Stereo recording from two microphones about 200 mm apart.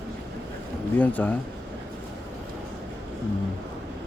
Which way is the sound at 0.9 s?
10° left (ahead or behind).